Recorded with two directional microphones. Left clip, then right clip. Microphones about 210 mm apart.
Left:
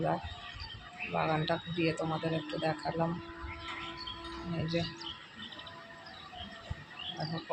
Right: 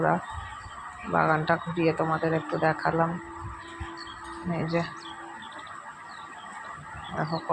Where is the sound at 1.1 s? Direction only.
15° right (ahead or behind).